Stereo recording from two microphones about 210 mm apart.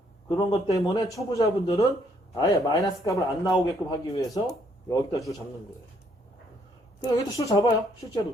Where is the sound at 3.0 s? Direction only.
15° left (ahead or behind).